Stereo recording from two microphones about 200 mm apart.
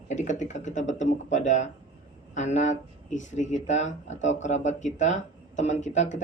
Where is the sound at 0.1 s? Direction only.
35° left (ahead or behind).